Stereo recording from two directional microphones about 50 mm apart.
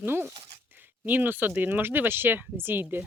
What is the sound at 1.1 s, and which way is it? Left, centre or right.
Speech, right.